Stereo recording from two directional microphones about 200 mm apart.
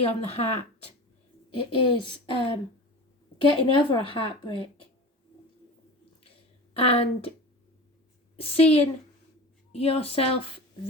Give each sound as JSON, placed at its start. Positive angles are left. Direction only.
{"t": 0.0, "sound": "speech", "side_deg": 30}
{"t": 1.5, "sound": "speech", "side_deg": 25}
{"t": 6.7, "sound": "speech", "side_deg": 30}
{"t": 8.4, "sound": "speech", "side_deg": 30}